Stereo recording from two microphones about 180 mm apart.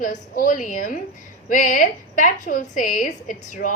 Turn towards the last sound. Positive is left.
turn(degrees=50)  # may be behind; listen again after turning